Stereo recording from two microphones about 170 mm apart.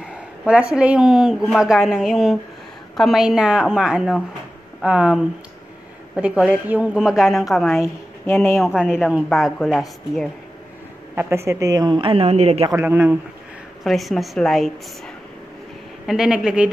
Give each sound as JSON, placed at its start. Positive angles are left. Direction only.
{"t": 0.0, "sound": "a woman's voice", "side_deg": -5}
{"t": 9.1, "sound": "a woman's voice", "side_deg": 0}
{"t": 11.1, "sound": "a woman's voice", "side_deg": -15}
{"t": 12.6, "sound": "speech", "side_deg": -15}
{"t": 13.8, "sound": "a woman's voice", "side_deg": 0}
{"t": 16.1, "sound": "a woman's voice", "side_deg": -5}